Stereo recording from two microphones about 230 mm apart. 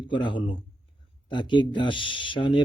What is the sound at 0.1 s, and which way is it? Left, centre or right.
Speech, left.